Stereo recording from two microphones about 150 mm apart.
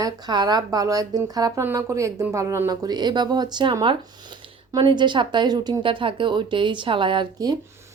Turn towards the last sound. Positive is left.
turn(degrees=-30)  # may be behind; listen again after turning